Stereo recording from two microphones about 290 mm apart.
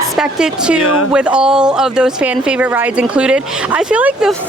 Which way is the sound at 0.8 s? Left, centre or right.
Left.